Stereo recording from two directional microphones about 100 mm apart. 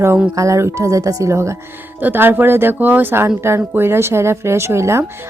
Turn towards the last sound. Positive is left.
turn(degrees=-25)  # may be behind; listen again after turning